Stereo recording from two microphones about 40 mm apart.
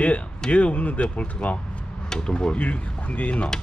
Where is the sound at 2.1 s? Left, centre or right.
Centre.